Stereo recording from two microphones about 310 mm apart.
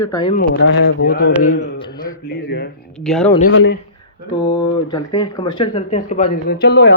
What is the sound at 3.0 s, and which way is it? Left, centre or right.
Speech, centre.